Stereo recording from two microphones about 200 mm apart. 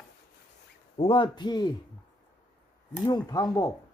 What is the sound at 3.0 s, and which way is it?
Speech, 20° left (ahead or behind).